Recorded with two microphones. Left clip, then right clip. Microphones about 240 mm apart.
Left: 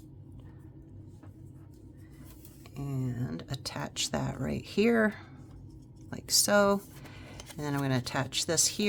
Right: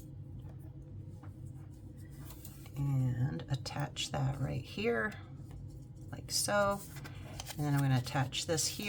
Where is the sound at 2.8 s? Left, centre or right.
Left.